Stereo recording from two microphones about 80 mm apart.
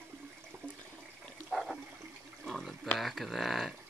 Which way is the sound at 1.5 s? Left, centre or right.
Centre.